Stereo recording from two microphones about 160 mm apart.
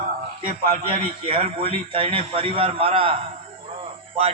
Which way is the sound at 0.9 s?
35° right (ahead or behind).